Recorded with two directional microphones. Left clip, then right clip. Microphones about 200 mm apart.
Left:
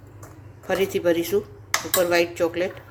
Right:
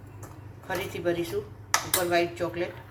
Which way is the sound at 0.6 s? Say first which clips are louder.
Left 8 dB; 60° left (ahead or behind).